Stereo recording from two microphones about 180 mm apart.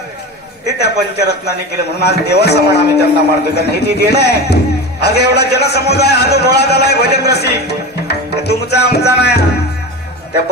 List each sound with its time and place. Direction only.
0.7 s a man's voice: 65° left (ahead or behind)